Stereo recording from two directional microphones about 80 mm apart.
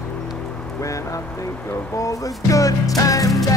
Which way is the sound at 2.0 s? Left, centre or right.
Left.